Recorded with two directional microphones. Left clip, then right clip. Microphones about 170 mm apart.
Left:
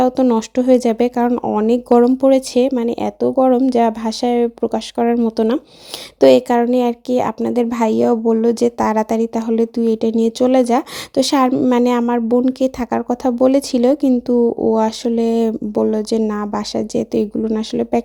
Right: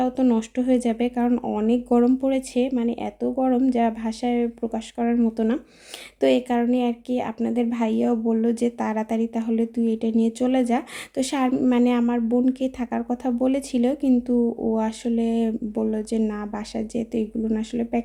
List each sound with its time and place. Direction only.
0.0 s speech: 35° left (ahead or behind)